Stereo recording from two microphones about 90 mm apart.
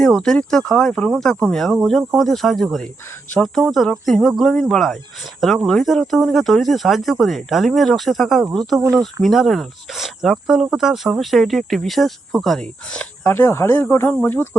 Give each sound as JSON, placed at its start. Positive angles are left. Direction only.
{"t": 0.0, "sound": "speech", "side_deg": 5}
{"t": 13.3, "sound": "speech", "side_deg": 30}